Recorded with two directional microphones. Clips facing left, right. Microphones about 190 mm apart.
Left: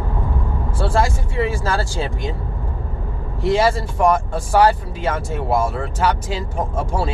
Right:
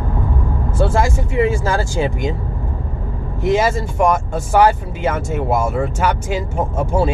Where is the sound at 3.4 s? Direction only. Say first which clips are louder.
Right 1 dB; 15° right (ahead or behind).